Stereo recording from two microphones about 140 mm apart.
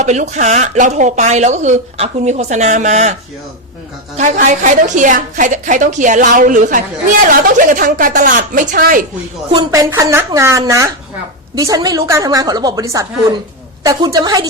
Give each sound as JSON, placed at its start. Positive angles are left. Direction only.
{"t": 0.0, "sound": "speech", "side_deg": -55}
{"t": 4.2, "sound": "a woman's voice", "side_deg": -60}
{"t": 9.7, "sound": "a woman's voice", "side_deg": -20}